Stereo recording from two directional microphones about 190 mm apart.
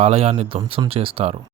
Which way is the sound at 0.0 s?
35° right (ahead or behind).